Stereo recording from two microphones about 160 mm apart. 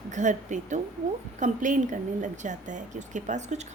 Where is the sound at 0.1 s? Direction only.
50° right (ahead or behind).